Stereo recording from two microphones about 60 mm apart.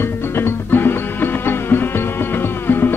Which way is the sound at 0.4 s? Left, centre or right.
Left.